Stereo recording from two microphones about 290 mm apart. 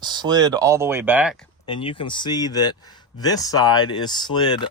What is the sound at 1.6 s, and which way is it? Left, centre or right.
Speech, centre.